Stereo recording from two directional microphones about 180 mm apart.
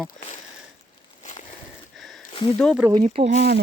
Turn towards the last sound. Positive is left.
turn(degrees=-40)  # may be behind; listen again after turning